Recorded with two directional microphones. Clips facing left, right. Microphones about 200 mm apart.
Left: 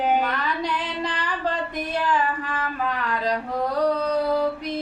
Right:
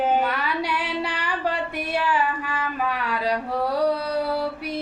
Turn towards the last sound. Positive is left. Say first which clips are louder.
# left 1 dB
turn(degrees=-10)  # may be behind; listen again after turning